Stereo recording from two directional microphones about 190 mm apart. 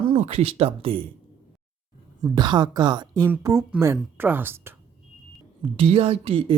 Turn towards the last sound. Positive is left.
turn(degrees=-30)  # may be behind; listen again after turning